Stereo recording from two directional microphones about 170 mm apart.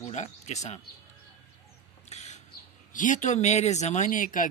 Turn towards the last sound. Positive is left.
turn(degrees=50)  # may be behind; listen again after turning